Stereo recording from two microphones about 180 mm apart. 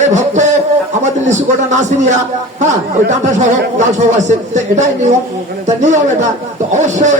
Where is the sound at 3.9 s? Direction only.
40° right (ahead or behind).